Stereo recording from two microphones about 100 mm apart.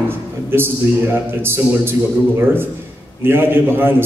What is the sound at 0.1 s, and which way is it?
A man's voice, 25° right (ahead or behind).